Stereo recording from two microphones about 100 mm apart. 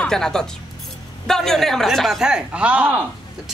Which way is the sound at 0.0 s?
5° left (ahead or behind).